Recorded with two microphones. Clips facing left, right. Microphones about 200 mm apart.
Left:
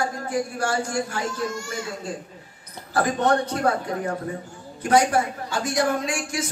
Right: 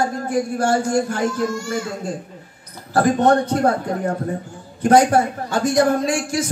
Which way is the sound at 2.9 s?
50° right (ahead or behind).